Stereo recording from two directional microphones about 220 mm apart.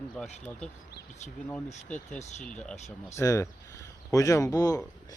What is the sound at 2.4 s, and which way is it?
Speech, 5° left (ahead or behind).